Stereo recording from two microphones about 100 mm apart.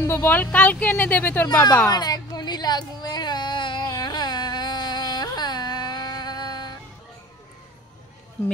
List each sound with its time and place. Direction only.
0.0 s speech: 25° left (ahead or behind)
1.9 s baby cry: 40° left (ahead or behind)